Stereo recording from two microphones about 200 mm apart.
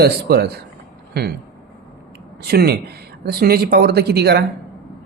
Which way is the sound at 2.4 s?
50° right (ahead or behind).